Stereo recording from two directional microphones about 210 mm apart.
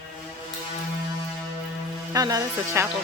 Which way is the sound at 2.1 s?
15° right (ahead or behind).